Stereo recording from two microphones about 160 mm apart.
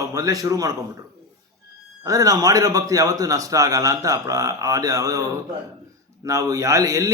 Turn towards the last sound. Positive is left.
turn(degrees=-20)  # may be behind; listen again after turning